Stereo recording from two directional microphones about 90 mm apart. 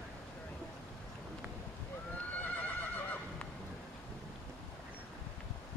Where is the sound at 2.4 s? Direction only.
15° left (ahead or behind).